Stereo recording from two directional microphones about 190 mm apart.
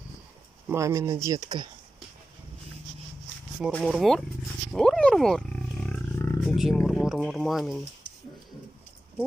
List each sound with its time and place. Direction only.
0.7 s speech: 15° right (ahead or behind)
3.8 s speech: centre (ahead or behind)
4.7 s wild animals: 5° left (ahead or behind)
5.9 s roaring cats: 15° left (ahead or behind)
6.4 s speech: centre (ahead or behind)